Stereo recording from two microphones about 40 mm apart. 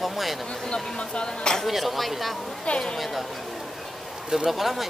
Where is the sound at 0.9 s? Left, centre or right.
Left.